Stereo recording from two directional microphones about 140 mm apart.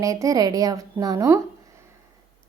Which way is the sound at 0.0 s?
25° right (ahead or behind).